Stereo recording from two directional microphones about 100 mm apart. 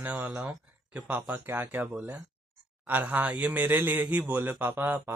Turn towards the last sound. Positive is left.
turn(degrees=-20)  # may be behind; listen again after turning